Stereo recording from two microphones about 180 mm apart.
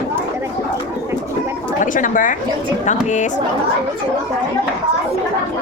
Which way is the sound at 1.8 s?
45° left (ahead or behind).